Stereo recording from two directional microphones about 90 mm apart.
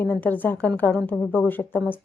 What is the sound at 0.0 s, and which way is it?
A woman's voice, 20° left (ahead or behind).